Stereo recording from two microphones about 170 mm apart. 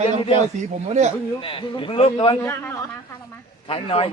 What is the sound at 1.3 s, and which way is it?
A man's voice, 30° left (ahead or behind).